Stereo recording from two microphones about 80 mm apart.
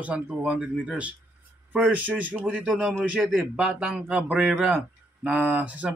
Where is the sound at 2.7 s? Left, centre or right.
Centre.